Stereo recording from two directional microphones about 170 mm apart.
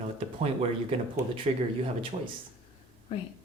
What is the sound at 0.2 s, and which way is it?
Speech, 35° right (ahead or behind).